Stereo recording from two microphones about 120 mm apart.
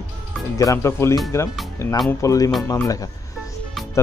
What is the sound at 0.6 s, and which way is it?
Speech, 25° left (ahead or behind).